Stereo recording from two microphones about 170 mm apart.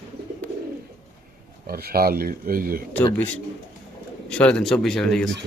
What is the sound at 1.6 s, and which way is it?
Speech, 60° right (ahead or behind).